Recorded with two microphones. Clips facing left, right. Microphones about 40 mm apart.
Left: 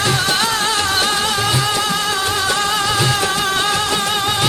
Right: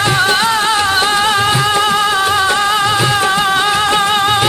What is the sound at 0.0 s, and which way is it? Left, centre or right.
Music, right.